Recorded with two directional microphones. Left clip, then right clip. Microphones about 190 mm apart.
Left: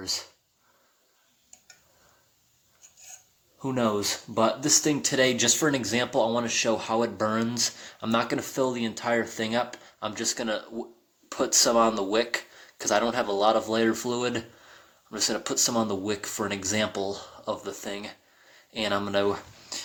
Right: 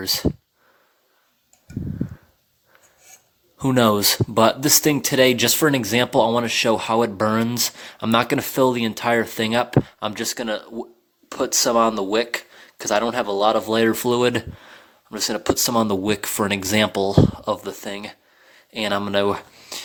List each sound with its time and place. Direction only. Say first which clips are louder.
0.0 s speech: right 8 dB; 40° right (ahead or behind)
3.6 s speech: right 9 dB; 45° right (ahead or behind)